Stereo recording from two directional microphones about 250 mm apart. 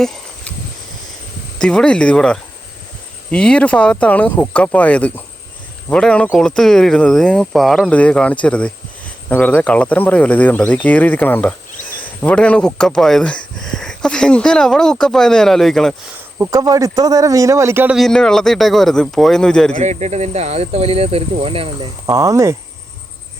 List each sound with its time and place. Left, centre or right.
0.0 s a sound: centre
1.5 s speech: centre
16.4 s speech: centre
19.7 s speech: right; by 22.5 s centre